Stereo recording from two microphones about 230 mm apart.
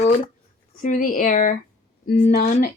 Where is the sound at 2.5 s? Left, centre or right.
Left.